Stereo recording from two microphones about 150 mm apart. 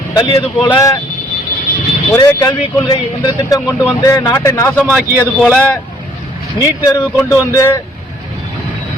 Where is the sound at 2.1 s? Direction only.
20° left (ahead or behind).